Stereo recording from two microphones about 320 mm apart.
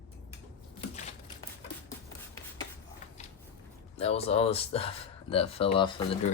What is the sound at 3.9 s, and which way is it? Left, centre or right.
Speech, centre.